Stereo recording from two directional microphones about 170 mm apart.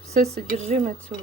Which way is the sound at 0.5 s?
40° right (ahead or behind).